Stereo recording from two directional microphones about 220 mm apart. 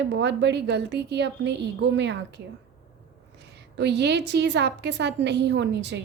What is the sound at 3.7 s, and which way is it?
A woman's voice, 50° right (ahead or behind).